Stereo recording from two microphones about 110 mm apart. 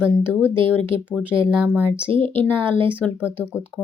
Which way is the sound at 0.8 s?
50° right (ahead or behind).